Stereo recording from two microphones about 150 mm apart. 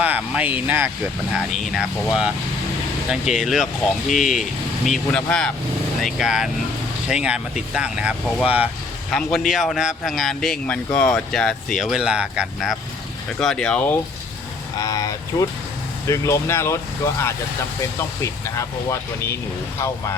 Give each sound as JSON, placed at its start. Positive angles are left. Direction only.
{"t": 0.0, "sound": "speech", "side_deg": -10}
{"t": 9.0, "sound": "speech", "side_deg": 5}
{"t": 14.8, "sound": "speech", "side_deg": 25}